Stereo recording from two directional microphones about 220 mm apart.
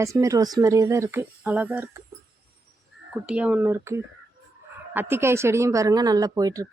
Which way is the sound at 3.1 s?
5° right (ahead or behind).